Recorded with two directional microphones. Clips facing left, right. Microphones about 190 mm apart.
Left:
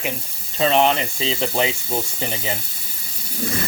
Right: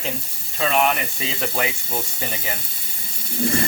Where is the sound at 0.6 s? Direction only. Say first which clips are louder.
Left 3 dB; 30° left (ahead or behind).